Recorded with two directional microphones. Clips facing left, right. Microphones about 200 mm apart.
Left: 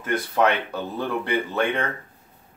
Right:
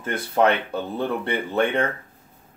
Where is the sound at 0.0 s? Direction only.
30° right (ahead or behind).